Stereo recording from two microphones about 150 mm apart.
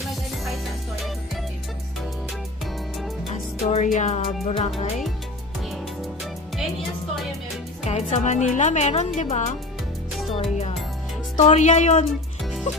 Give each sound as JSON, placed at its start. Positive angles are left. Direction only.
{"t": 3.3, "sound": "music", "side_deg": 50}
{"t": 7.8, "sound": "speech", "side_deg": 50}
{"t": 10.3, "sound": "speech", "side_deg": 40}
{"t": 11.3, "sound": "speech", "side_deg": 50}